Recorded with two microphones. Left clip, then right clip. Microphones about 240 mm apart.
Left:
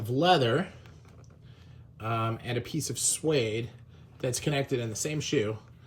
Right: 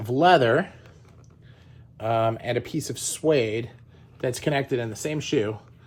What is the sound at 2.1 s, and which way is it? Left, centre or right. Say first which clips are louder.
Speech: right 9 dB; centre.